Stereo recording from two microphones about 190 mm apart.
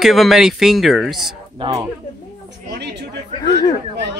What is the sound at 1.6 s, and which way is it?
Speech, 20° right (ahead or behind).